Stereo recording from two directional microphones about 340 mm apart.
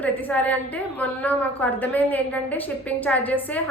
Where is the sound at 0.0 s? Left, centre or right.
Centre.